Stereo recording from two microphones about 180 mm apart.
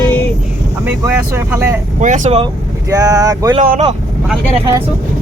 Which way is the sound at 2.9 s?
20° right (ahead or behind).